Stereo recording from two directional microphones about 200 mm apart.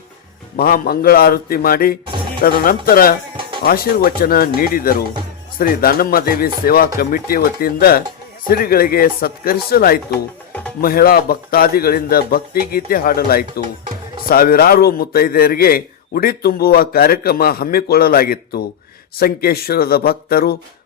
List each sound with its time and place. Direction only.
0.5 s a man's voice: 50° left (ahead or behind)
10.1 s music: 5° left (ahead or behind)
10.8 s a man's voice: 45° left (ahead or behind)